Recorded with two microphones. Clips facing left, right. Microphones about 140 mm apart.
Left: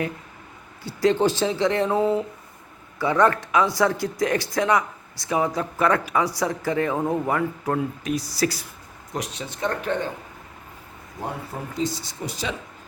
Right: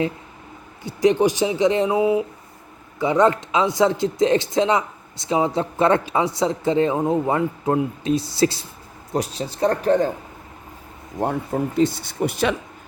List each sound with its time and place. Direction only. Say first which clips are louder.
0.9 s speech: right 3 dB; 15° right (ahead or behind); by 10.1 s 35° right (ahead or behind)
11.7 s speech: right 5 dB; 60° right (ahead or behind)